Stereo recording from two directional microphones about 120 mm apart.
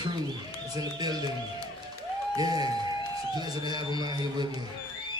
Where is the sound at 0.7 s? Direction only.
35° right (ahead or behind).